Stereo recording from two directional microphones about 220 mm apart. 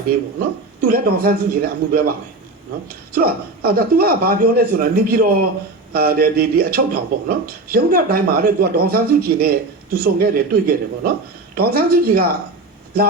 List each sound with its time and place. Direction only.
0.8 s speech: 40° right (ahead or behind)